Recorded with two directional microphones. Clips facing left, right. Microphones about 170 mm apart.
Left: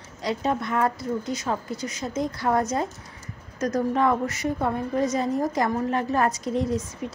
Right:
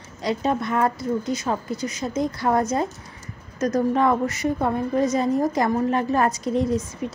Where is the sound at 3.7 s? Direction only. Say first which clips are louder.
Right 2 dB; 30° right (ahead or behind).